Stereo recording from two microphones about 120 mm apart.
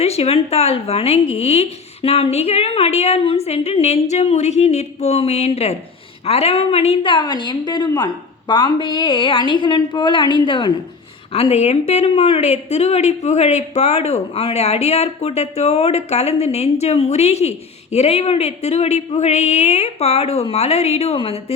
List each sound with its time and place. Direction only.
0.0 s a woman's voice: 60° left (ahead or behind); by 10.7 s 45° left (ahead or behind)
11.3 s a woman's voice: 55° left (ahead or behind)